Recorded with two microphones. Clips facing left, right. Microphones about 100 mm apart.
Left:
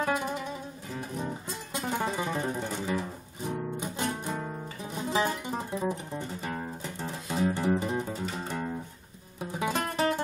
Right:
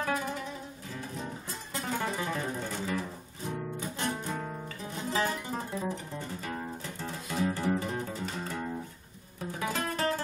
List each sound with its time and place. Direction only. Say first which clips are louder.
0.0 s music: left 3 dB; 20° left (ahead or behind)